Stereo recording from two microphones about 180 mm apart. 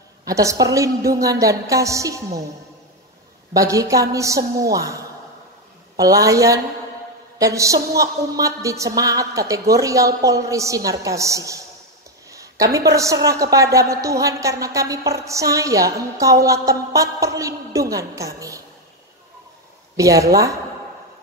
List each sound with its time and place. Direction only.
0.2 s a woman's voice: 15° right (ahead or behind)
3.5 s a woman's voice: 20° right (ahead or behind)
20.0 s a woman's voice: 15° right (ahead or behind)